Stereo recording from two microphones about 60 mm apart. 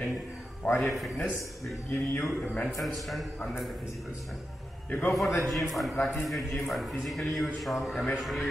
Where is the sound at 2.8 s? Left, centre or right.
Centre.